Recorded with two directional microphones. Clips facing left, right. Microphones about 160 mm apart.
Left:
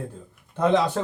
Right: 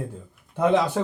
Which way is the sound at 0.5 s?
10° right (ahead or behind).